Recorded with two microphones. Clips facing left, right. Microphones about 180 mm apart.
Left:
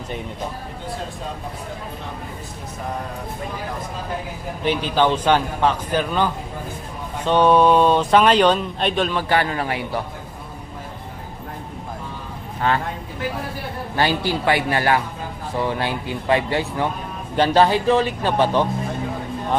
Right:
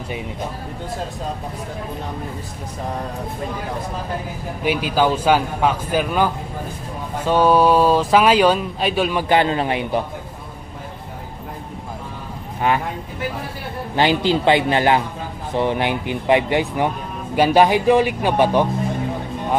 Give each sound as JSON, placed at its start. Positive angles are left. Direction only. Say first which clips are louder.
{"t": 4.6, "sound": "speech", "louder": "right 1 dB", "side_deg": -10}
{"t": 12.6, "sound": "speech", "louder": "right 2 dB", "side_deg": -15}
{"t": 13.9, "sound": "speech", "louder": "right 4 dB", "side_deg": -20}